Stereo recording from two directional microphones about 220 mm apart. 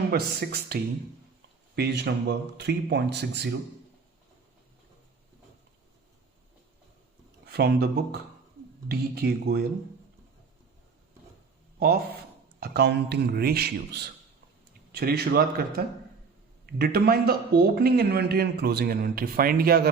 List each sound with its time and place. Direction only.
0.1 s a man's voice: 45° right (ahead or behind)
7.4 s a man's voice: 45° right (ahead or behind)
12.5 s a man's voice: 45° right (ahead or behind)